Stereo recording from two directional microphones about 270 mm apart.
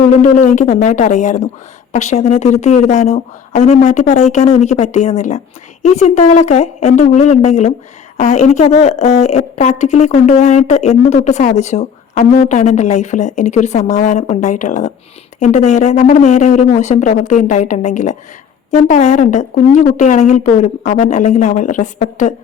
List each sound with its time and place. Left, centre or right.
0.2 s a woman's voice: left